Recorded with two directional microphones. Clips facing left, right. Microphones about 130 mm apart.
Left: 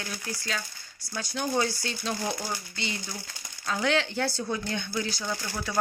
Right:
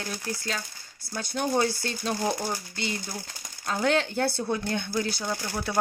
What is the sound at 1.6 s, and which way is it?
Speech, 45° right (ahead or behind).